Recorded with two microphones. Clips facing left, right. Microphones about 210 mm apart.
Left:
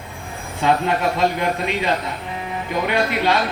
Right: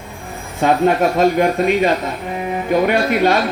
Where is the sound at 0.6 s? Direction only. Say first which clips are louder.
Right 5 dB; 45° right (ahead or behind).